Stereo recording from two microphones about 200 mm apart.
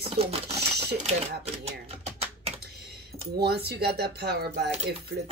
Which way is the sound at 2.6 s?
55° right (ahead or behind).